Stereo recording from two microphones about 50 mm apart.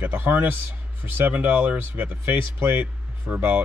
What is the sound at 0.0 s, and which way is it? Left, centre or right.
Speech, right.